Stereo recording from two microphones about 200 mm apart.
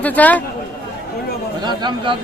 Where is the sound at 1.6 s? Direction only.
20° right (ahead or behind).